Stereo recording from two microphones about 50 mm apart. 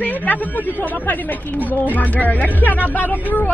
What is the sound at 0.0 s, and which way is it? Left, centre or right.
Speech, left.